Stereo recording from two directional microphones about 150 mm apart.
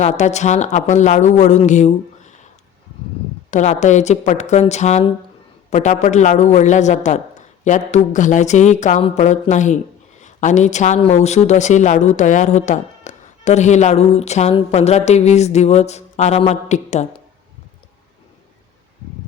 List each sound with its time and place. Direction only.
0.0 s speech: 50° left (ahead or behind)
3.5 s speech: 50° left (ahead or behind)